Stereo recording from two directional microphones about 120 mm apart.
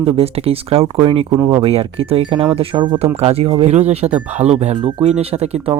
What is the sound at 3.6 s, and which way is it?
Speech, 65° right (ahead or behind).